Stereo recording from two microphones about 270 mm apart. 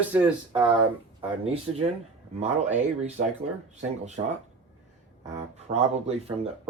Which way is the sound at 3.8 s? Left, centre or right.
Right.